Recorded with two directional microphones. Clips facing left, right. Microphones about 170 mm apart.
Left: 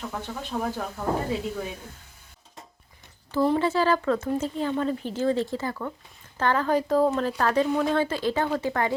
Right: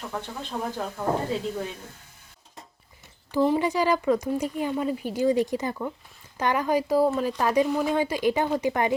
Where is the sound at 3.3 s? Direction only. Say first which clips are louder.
Even; 15° right (ahead or behind).